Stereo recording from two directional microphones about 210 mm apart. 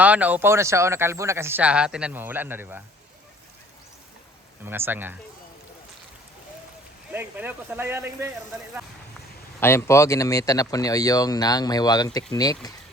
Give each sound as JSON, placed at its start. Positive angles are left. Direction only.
{"t": 0.0, "sound": "speech", "side_deg": -5}
{"t": 4.6, "sound": "speech", "side_deg": -10}
{"t": 7.1, "sound": "speech", "side_deg": -10}
{"t": 9.6, "sound": "speech", "side_deg": 10}